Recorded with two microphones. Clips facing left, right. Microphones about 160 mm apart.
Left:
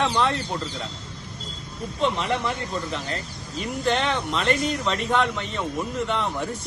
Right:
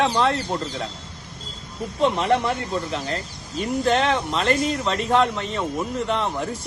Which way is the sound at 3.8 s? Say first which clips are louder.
Right 2 dB; 30° right (ahead or behind).